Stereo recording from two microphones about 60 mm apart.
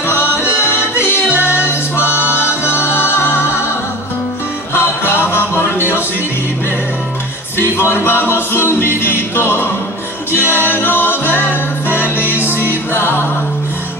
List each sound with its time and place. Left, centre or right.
0.1 s music: left
4.7 s music: left
7.5 s music: left